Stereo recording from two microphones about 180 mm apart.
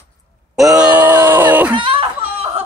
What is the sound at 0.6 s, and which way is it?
Speech, 5° right (ahead or behind).